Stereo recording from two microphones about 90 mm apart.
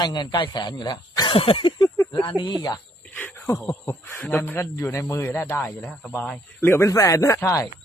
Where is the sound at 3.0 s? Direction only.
20° left (ahead or behind).